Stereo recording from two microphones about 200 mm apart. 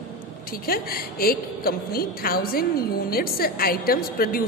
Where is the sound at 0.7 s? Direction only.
50° left (ahead or behind).